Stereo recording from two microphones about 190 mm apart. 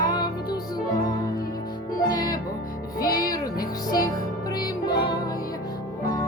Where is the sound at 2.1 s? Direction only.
20° left (ahead or behind).